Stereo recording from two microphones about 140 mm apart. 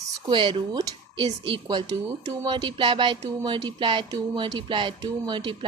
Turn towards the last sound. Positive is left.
turn(degrees=-30)  # may be behind; listen again after turning